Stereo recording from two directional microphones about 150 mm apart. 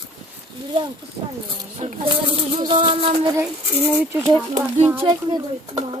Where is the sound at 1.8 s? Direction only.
40° right (ahead or behind).